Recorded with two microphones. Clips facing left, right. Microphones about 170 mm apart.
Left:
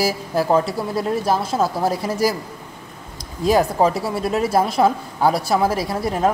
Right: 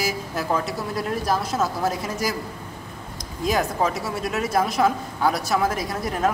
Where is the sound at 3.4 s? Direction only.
30° left (ahead or behind).